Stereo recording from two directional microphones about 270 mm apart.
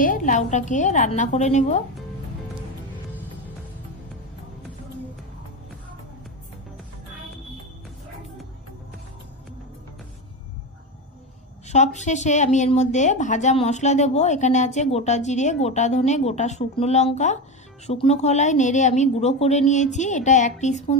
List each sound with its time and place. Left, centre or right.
0.0 s a woman's voice: left
11.6 s a woman's voice: left